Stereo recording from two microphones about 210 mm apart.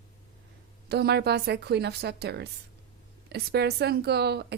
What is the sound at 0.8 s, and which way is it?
A woman's voice, 50° right (ahead or behind).